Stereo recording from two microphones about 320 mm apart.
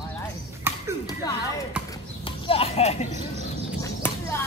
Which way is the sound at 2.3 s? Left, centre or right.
Centre.